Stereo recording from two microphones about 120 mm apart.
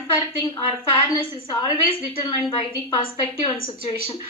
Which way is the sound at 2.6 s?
45° left (ahead or behind).